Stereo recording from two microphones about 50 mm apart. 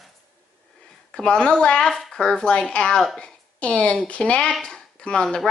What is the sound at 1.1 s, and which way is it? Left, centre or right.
A woman's voice, centre.